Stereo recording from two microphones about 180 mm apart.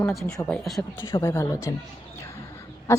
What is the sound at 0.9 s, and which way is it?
Speech, 15° left (ahead or behind).